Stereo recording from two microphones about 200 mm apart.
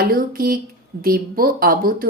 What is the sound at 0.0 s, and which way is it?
Speech, 45° right (ahead or behind).